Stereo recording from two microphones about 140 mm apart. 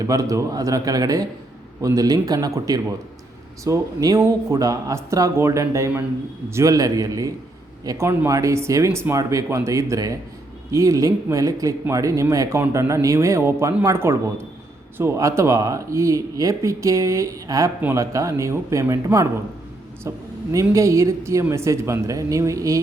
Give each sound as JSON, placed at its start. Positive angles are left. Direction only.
{"t": 0.0, "sound": "speech", "side_deg": -25}